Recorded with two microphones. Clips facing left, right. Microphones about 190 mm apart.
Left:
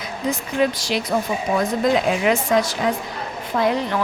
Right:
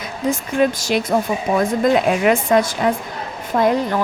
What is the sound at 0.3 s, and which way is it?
Speech, 50° right (ahead or behind).